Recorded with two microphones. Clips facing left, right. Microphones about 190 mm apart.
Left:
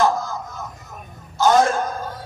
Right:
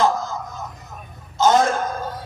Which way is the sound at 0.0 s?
20° right (ahead or behind).